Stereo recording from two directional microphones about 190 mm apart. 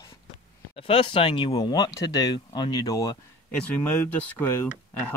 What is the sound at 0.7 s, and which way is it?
Speech, 30° left (ahead or behind).